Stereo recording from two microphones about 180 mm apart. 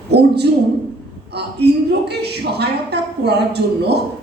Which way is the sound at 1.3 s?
65° right (ahead or behind).